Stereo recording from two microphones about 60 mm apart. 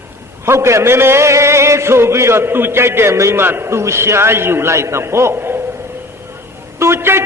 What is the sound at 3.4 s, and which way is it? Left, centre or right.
A man's voice, right.